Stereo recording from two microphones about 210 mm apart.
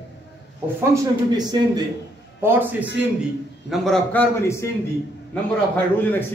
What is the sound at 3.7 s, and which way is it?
Speech, centre (ahead or behind).